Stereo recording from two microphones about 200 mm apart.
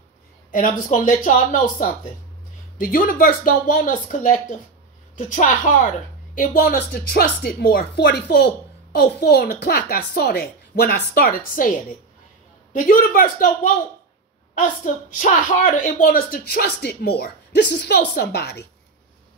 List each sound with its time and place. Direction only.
0.5 s a woman's voice: 40° left (ahead or behind)
12.7 s a woman's voice: 45° left (ahead or behind)
15.1 s a woman's voice: 40° left (ahead or behind)